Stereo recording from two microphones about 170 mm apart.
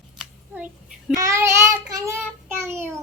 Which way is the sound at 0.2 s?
5° right (ahead or behind).